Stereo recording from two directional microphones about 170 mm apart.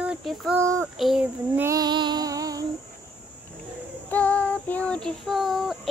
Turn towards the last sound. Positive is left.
turn(degrees=0)  # may be behind; listen again after turning